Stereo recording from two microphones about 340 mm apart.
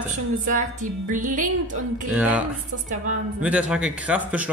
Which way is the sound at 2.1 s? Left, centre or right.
Centre.